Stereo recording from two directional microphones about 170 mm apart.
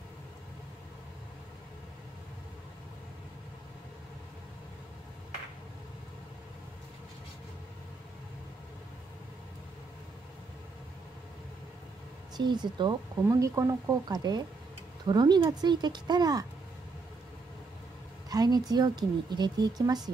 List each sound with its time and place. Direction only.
12.4 s speech: 25° right (ahead or behind)
18.3 s speech: 25° right (ahead or behind)